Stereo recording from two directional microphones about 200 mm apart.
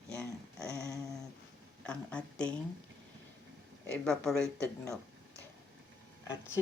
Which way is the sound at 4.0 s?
5° left (ahead or behind).